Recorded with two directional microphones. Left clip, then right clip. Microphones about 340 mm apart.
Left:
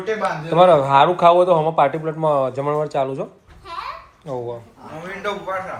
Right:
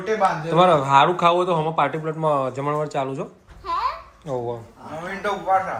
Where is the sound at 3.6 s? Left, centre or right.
Centre.